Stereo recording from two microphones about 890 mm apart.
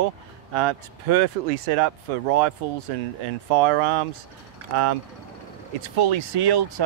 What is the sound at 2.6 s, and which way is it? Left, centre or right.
Speech, right.